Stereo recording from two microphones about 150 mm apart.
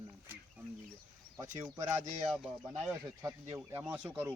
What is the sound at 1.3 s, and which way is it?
Speech, 20° right (ahead or behind).